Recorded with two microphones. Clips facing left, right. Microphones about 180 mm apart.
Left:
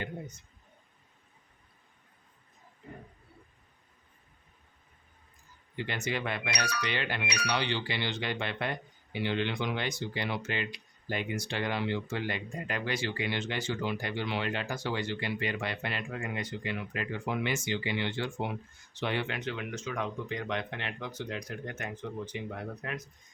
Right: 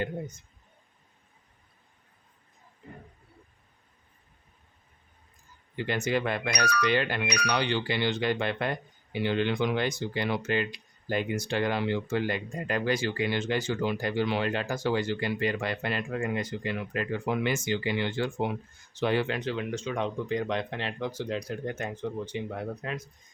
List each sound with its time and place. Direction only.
5.7 s speech: 45° right (ahead or behind); by 23.0 s 30° right (ahead or behind)